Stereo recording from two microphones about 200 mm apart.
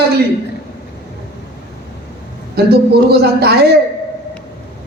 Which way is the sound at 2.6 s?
50° right (ahead or behind).